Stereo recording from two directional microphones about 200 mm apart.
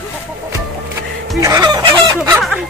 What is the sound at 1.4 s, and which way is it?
Fowl, 20° right (ahead or behind).